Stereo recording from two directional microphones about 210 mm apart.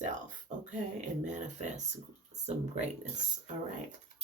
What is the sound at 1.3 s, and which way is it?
Speech, 35° right (ahead or behind).